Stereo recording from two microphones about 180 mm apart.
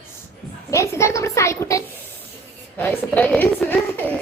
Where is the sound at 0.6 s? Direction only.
15° left (ahead or behind).